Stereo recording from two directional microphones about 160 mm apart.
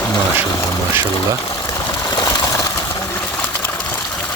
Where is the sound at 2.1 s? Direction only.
25° left (ahead or behind).